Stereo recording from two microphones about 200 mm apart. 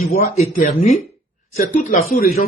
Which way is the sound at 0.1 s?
35° left (ahead or behind).